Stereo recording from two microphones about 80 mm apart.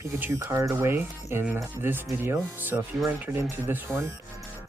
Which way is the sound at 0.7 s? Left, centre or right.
Right.